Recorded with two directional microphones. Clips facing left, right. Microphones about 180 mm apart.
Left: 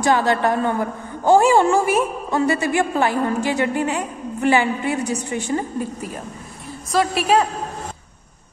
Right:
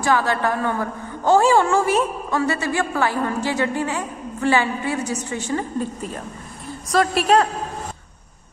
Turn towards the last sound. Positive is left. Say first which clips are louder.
# right 1 dB
turn(degrees=0)  # may be behind; listen again after turning